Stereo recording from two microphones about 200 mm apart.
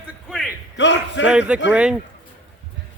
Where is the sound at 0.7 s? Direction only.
65° left (ahead or behind).